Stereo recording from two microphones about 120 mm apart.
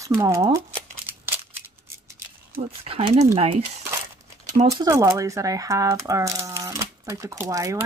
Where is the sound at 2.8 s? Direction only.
55° right (ahead or behind).